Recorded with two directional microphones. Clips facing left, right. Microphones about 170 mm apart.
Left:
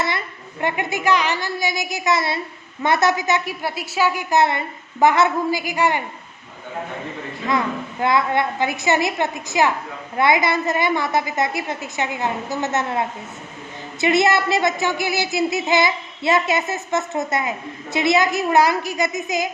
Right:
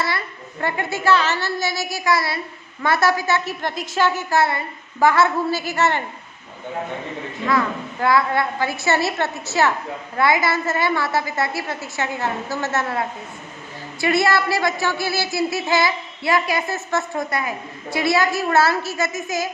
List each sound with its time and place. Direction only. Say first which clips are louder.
0.6 s a woman's voice: left 1 dB; 15° left (ahead or behind)
8.0 s a woman's voice: even; 20° left (ahead or behind)